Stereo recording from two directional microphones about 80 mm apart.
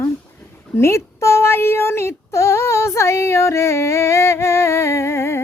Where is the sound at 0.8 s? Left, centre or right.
Left.